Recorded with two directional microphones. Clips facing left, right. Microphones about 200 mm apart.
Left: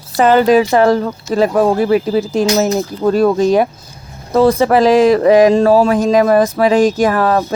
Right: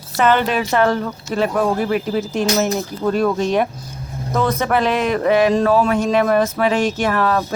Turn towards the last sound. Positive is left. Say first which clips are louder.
# left 5 dB
turn(degrees=35)  # may be behind; listen again after turning